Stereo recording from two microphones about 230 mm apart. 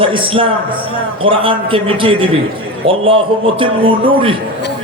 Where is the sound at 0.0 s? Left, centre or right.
Right.